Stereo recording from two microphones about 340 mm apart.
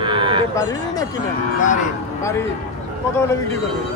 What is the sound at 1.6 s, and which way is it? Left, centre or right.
Speech, left.